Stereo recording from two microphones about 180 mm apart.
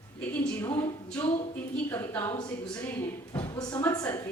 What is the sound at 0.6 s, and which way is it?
A woman's voice, 15° left (ahead or behind).